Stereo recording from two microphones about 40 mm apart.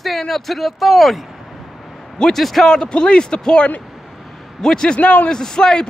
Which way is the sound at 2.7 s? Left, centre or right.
Left.